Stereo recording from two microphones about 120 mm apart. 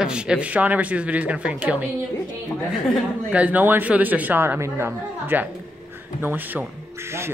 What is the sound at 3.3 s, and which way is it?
A man's voice, 10° right (ahead or behind).